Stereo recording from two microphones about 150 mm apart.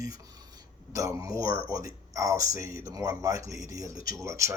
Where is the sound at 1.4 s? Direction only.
75° left (ahead or behind).